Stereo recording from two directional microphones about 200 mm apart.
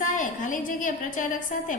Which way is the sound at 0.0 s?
40° left (ahead or behind).